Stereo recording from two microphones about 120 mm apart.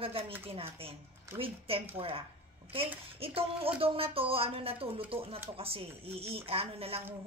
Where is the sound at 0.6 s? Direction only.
50° right (ahead or behind).